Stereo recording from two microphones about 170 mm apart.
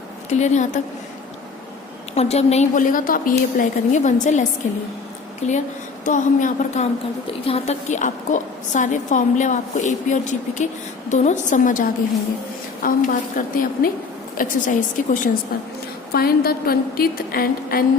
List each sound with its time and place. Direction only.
0.3 s a woman's voice: 45° left (ahead or behind)
2.1 s a woman's voice: 40° left (ahead or behind)
16.1 s a woman's voice: 65° left (ahead or behind)